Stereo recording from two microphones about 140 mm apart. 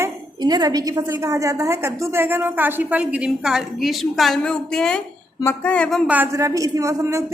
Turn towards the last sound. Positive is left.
turn(degrees=-20)  # may be behind; listen again after turning